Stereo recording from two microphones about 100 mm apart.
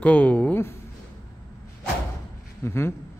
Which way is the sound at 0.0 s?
15° left (ahead or behind).